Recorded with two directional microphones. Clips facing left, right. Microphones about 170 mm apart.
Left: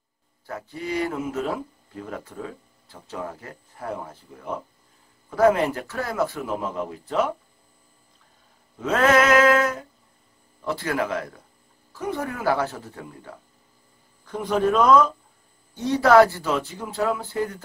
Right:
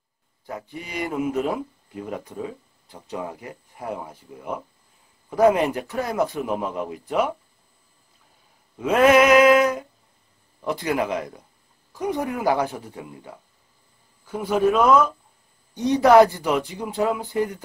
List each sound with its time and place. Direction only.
0.5 s speech: 15° right (ahead or behind)
8.7 s mantra: 10° right (ahead or behind)
10.6 s speech: 15° right (ahead or behind)